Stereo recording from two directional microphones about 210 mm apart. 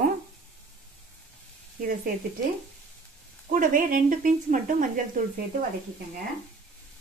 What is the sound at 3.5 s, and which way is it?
A woman's voice, 40° right (ahead or behind).